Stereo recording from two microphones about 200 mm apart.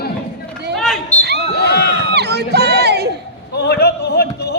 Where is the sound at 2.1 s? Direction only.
55° right (ahead or behind).